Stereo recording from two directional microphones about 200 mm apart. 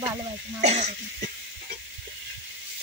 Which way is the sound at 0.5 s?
35° right (ahead or behind).